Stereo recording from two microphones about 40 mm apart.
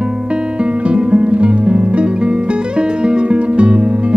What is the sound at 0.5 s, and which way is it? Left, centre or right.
Guitar, right.